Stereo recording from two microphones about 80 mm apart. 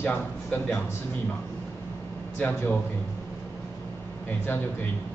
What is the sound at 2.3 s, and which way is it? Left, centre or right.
Speech, centre.